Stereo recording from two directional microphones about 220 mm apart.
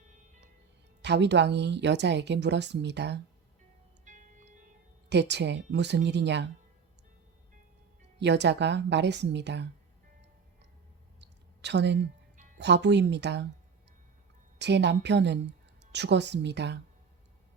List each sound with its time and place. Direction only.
1.0 s a woman's voice: 50° right (ahead or behind)
4.0 s music: 35° right (ahead or behind)
5.0 s a woman's voice: 50° right (ahead or behind)
8.2 s a woman's voice: 50° right (ahead or behind)
11.2 s a sound: 50° right (ahead or behind)
12.5 s a woman's voice: 50° right (ahead or behind)
14.6 s a woman's voice: 50° right (ahead or behind)